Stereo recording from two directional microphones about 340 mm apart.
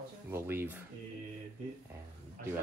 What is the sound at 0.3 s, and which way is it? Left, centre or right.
Speech, centre.